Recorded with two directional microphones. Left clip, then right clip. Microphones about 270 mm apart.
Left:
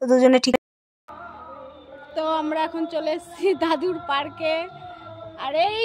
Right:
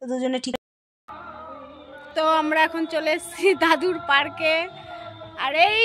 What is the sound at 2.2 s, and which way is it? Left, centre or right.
A woman's voice, centre.